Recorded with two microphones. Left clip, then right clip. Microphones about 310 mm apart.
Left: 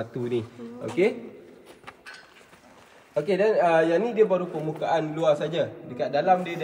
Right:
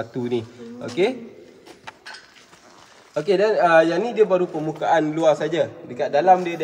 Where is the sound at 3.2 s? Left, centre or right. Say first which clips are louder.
Right 4 dB; right.